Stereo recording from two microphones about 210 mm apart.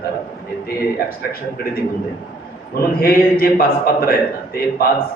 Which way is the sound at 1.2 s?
45° left (ahead or behind).